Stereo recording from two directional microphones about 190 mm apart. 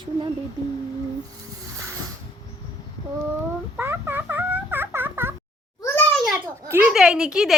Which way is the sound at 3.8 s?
10° right (ahead or behind).